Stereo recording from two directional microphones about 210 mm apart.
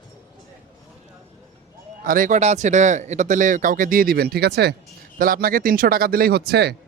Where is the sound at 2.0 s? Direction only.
40° right (ahead or behind).